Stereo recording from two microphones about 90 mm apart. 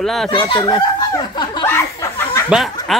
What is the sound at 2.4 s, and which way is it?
Speech, 5° right (ahead or behind).